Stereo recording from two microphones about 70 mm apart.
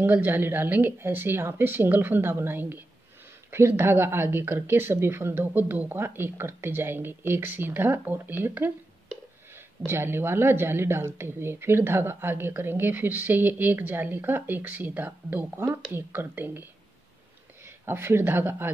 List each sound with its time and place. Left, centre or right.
0.0 s a woman's voice: right
9.8 s a woman's voice: right
17.6 s speech: right